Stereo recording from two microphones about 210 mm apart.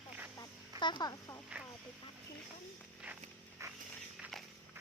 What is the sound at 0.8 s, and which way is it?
Speech, 20° left (ahead or behind).